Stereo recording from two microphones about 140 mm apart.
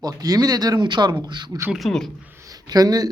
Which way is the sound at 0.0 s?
25° right (ahead or behind).